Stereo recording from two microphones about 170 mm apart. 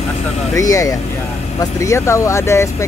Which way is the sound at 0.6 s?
20° left (ahead or behind).